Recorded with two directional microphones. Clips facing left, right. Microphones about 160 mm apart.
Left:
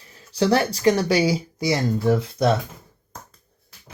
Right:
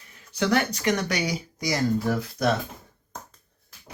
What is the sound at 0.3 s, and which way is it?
Speech, 30° left (ahead or behind).